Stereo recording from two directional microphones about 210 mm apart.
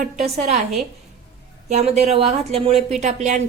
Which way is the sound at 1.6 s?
35° right (ahead or behind).